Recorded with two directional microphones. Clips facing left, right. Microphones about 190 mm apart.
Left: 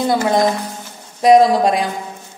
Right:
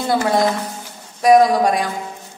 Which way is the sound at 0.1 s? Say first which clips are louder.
Right 1 dB; 20° left (ahead or behind).